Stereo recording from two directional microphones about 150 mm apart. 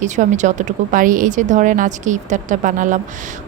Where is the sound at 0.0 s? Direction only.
55° right (ahead or behind).